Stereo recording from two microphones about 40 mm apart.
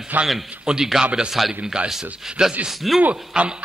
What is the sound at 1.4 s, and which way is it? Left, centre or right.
Speech, centre.